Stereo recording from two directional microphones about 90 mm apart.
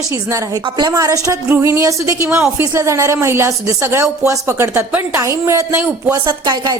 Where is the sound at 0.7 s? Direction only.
50° right (ahead or behind).